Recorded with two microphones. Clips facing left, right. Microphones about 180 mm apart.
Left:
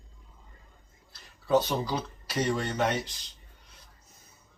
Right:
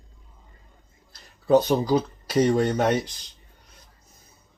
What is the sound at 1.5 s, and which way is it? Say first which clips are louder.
Speech: right 7 dB; 45° right (ahead or behind).